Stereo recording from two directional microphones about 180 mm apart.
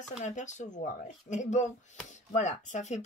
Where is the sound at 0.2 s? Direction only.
40° left (ahead or behind).